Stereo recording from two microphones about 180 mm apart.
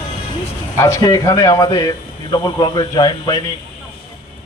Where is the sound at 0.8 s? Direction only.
20° left (ahead or behind).